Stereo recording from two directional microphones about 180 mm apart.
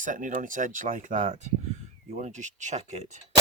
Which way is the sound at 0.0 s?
45° right (ahead or behind).